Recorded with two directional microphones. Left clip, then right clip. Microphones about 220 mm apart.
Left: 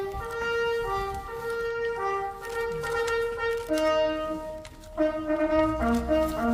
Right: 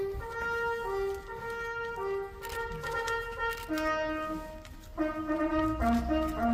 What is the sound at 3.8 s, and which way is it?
Music, 30° left (ahead or behind).